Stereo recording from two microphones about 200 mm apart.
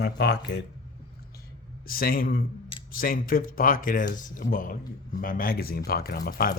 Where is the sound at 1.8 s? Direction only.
45° left (ahead or behind).